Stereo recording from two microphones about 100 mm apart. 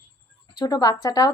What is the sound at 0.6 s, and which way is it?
Speech, 40° left (ahead or behind).